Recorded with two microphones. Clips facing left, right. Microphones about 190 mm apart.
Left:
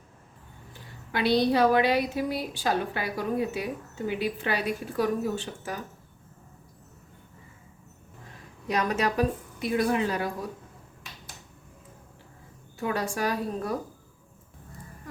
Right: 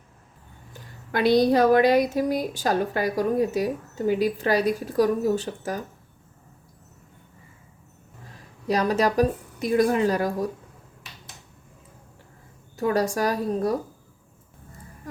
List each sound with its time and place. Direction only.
0.7 s speech: 45° right (ahead or behind)
8.6 s a woman's voice: 35° right (ahead or behind)
12.7 s a woman's voice: 40° right (ahead or behind)